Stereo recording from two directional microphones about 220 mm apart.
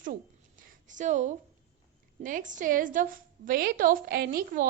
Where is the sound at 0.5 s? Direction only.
35° right (ahead or behind).